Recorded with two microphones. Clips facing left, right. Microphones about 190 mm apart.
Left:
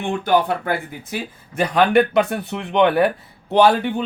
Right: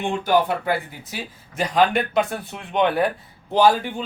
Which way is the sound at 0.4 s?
50° left (ahead or behind).